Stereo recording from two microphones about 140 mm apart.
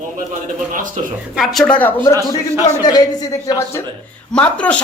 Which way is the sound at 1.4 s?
Centre (ahead or behind).